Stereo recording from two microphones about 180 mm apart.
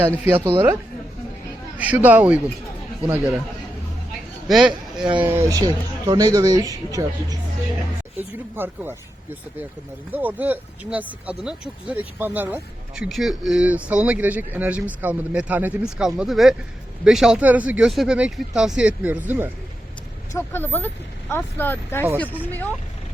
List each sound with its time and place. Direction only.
0.3 s speech: 10° right (ahead or behind)
1.8 s speech: 10° right (ahead or behind)
4.4 s speech: 5° right (ahead or behind); by 7.3 s 20° right (ahead or behind)
8.5 s speech: 10° right (ahead or behind)
10.1 s speech: 10° right (ahead or behind)
20.3 s speech: 10° left (ahead or behind)